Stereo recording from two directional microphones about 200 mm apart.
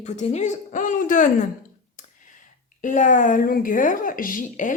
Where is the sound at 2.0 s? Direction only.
40° left (ahead or behind).